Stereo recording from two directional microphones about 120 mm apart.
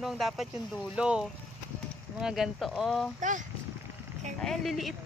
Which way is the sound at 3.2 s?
90° right.